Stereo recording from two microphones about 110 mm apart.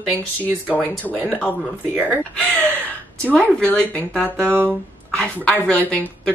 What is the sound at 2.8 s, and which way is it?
Speech, 15° left (ahead or behind).